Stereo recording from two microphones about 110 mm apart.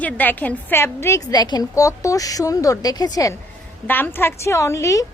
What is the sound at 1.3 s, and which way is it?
A woman's voice, 40° left (ahead or behind).